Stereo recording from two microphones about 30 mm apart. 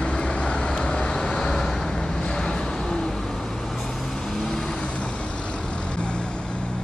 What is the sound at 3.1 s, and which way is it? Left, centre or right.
Vehicle, centre.